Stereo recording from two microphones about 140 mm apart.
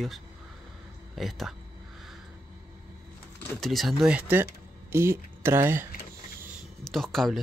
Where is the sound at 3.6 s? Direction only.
Centre (ahead or behind); by 5.8 s 15° right (ahead or behind).